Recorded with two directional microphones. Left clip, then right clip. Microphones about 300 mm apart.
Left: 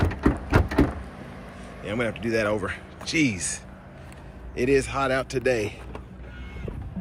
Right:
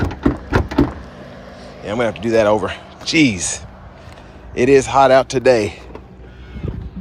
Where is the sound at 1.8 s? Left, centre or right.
Centre.